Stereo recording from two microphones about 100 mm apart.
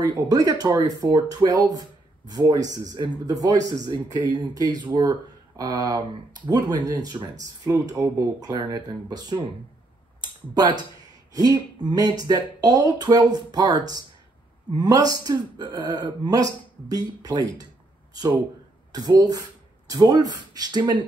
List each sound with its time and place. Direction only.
0.0 s speech: 35° right (ahead or behind)
18.9 s speech: 40° right (ahead or behind)